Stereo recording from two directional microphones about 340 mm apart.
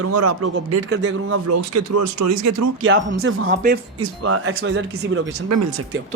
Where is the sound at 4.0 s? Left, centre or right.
Right.